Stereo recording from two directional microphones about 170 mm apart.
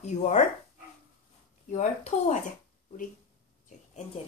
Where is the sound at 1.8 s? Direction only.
45° left (ahead or behind).